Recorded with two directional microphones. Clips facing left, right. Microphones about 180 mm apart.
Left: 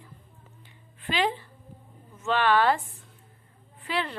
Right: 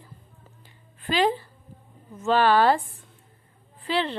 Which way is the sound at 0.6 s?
40° right (ahead or behind).